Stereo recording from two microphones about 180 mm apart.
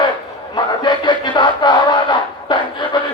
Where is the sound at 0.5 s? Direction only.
25° left (ahead or behind).